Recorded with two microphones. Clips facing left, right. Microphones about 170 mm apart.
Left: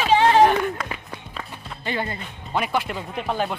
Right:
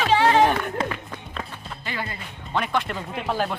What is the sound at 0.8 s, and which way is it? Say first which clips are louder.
Speech: right 4 dB; 25° right (ahead or behind).